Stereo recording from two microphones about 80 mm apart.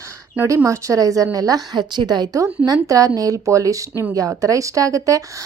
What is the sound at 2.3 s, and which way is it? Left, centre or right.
A woman's voice, right.